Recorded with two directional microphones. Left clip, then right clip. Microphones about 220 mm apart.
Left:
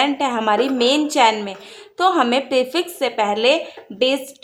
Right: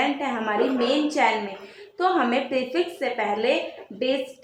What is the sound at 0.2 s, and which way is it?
Speech, 35° left (ahead or behind).